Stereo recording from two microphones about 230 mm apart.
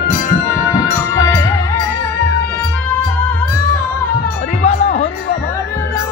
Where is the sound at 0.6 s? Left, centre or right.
Centre.